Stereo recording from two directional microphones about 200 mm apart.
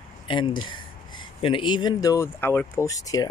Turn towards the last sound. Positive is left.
turn(degrees=15)  # may be behind; listen again after turning